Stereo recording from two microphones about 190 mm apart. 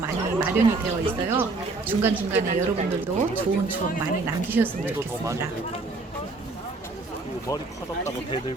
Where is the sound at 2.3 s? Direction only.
40° right (ahead or behind).